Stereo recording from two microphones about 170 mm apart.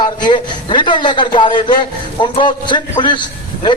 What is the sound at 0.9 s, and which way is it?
A man's voice, 25° left (ahead or behind).